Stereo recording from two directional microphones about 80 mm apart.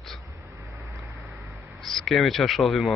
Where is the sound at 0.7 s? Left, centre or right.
Right.